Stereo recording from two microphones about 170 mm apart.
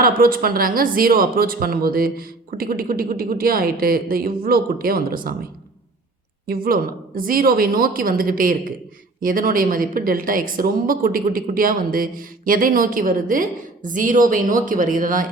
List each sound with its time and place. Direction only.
0.0 s a woman's voice: 60° right (ahead or behind)
6.5 s a woman's voice: 60° right (ahead or behind)